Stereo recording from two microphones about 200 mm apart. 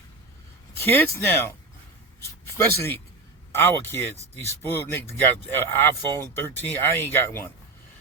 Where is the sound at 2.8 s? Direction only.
10° left (ahead or behind).